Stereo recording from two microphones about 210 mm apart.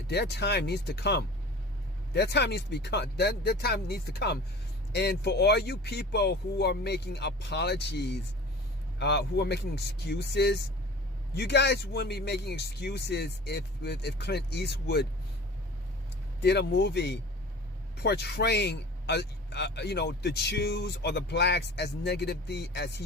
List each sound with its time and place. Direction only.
0.1 s speech: 50° left (ahead or behind)
16.4 s speech: 50° left (ahead or behind)